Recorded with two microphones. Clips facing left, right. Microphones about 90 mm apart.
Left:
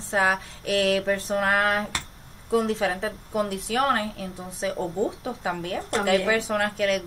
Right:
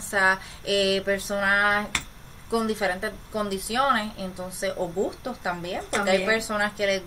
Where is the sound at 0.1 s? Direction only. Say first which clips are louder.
Even; 15° right (ahead or behind).